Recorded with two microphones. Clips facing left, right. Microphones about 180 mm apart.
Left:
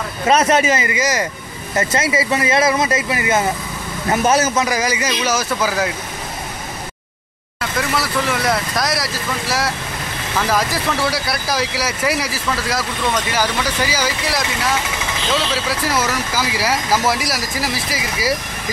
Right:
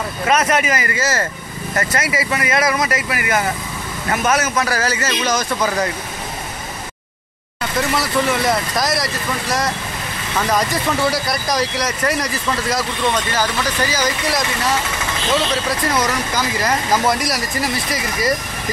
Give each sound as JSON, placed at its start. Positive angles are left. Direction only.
{"t": 0.3, "sound": "speech", "side_deg": 30}
{"t": 1.8, "sound": "speech", "side_deg": 25}
{"t": 4.6, "sound": "a man's voice", "side_deg": 15}
{"t": 7.9, "sound": "speech", "side_deg": 0}